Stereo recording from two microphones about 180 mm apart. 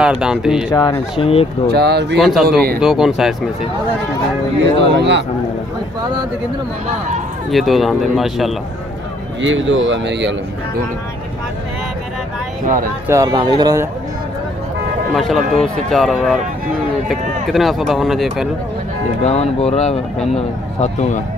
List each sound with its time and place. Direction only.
0.0 s speech: 5° right (ahead or behind)
0.7 s speech: 25° left (ahead or behind)
1.7 s speech: 65° right (ahead or behind)
2.1 s speech: centre (ahead or behind)
4.7 s speech: 75° right (ahead or behind)
7.5 s speech: centre (ahead or behind)
9.4 s speech: 90° right
12.6 s speech: 50° right (ahead or behind)
13.1 s speech: 20° right (ahead or behind)
15.1 s speech: centre (ahead or behind)
19.2 s speech: 35° left (ahead or behind)